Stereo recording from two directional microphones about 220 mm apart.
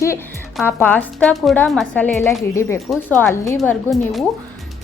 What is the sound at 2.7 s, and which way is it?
A woman's voice, centre (ahead or behind).